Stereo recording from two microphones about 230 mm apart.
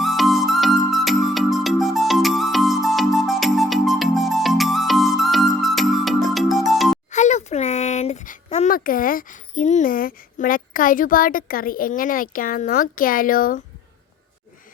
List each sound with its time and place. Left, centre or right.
0.0 s music: centre
7.1 s speech: left